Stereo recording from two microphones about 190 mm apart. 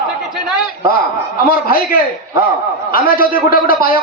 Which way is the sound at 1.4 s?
50° left (ahead or behind).